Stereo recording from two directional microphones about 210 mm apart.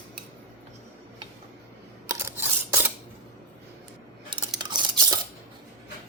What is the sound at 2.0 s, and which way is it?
Scissors, 10° right (ahead or behind).